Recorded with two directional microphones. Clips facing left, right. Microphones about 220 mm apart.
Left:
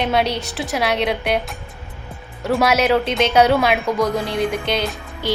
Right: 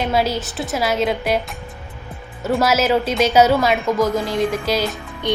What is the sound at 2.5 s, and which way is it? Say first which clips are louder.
A woman's voice: even; centre (ahead or behind).